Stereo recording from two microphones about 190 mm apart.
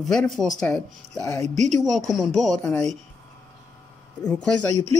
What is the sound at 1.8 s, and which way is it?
Speech, centre (ahead or behind).